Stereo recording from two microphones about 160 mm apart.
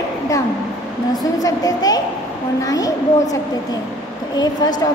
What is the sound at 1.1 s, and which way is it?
A woman's voice, 25° left (ahead or behind).